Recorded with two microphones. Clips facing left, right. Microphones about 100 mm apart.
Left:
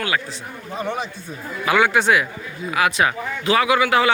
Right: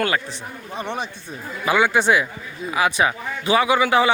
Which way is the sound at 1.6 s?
25° right (ahead or behind).